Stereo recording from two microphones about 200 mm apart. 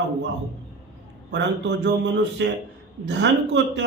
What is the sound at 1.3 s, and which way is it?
Speech, 60° right (ahead or behind).